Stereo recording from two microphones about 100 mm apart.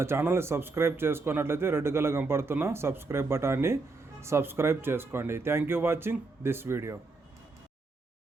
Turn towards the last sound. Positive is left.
turn(degrees=-25)  # may be behind; listen again after turning